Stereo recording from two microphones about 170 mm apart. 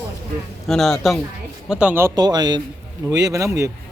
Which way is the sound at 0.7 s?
Centre (ahead or behind).